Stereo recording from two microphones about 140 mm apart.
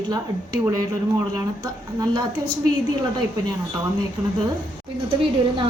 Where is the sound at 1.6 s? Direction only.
25° right (ahead or behind).